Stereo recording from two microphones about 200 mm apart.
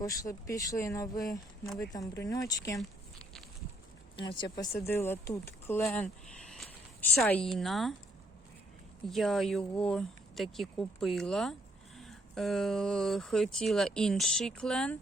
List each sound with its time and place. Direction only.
0.0 s speech: 15° left (ahead or behind)
4.5 s speech: 15° left (ahead or behind)
7.2 s speech: 5° left (ahead or behind)
9.0 s speech: centre (ahead or behind)